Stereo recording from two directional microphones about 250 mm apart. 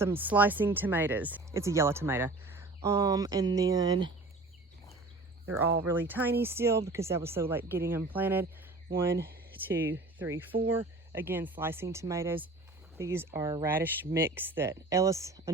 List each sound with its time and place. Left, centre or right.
0.0 s speech: centre
5.9 s speech: centre
9.1 s speech: right
9.6 s speech: centre